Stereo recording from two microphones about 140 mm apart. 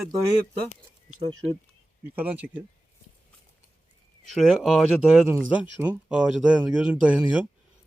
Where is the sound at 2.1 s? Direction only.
10° right (ahead or behind).